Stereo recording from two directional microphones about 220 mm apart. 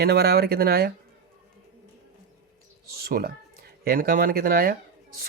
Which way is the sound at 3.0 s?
45° right (ahead or behind).